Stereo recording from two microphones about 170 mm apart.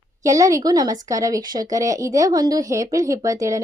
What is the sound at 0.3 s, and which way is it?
A woman's voice, 20° right (ahead or behind).